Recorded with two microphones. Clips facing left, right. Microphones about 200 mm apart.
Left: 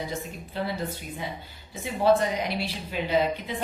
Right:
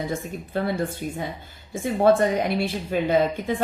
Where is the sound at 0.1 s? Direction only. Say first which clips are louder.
Right 6 dB; 50° right (ahead or behind).